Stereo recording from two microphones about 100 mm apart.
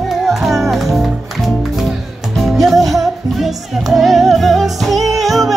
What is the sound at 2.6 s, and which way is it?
Music, centre (ahead or behind).